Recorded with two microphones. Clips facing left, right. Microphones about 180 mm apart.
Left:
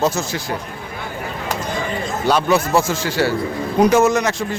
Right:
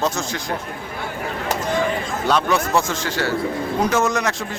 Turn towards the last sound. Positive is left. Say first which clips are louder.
# left 5 dB
turn(degrees=5)  # may be behind; listen again after turning